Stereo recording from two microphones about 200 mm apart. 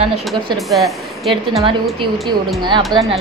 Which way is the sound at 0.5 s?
Centre (ahead or behind).